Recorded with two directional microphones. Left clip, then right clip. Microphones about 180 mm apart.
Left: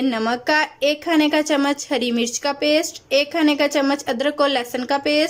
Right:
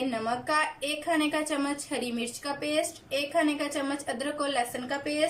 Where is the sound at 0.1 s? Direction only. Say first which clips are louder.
Left 9 dB; 55° left (ahead or behind).